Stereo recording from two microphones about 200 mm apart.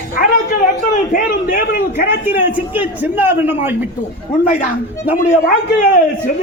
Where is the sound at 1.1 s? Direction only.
45° left (ahead or behind).